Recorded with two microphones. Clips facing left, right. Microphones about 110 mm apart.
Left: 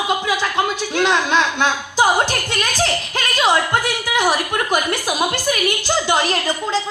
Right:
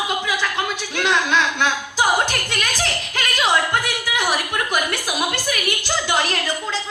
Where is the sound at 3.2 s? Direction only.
20° left (ahead or behind).